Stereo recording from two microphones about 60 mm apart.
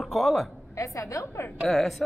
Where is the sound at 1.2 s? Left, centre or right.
Left.